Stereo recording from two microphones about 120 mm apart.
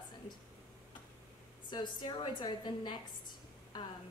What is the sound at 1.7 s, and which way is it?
A woman's voice, 40° left (ahead or behind).